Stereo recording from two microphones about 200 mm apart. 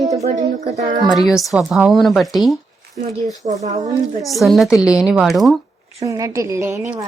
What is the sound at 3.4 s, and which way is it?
Speech, 35° right (ahead or behind).